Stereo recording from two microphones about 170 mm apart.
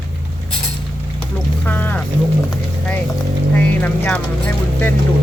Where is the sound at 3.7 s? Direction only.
10° left (ahead or behind).